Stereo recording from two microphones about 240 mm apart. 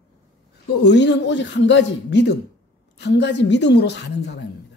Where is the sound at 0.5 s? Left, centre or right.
Left.